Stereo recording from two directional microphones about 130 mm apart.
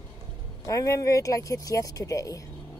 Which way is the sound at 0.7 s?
25° left (ahead or behind).